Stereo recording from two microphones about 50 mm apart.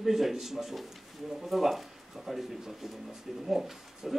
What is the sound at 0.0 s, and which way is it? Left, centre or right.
Speech, centre.